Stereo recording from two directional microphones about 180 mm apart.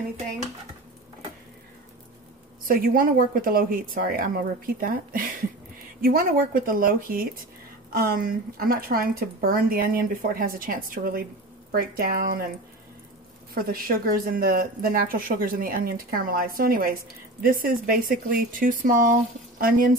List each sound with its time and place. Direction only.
2.7 s speech: 55° right (ahead or behind)
13.6 s speech: 55° right (ahead or behind)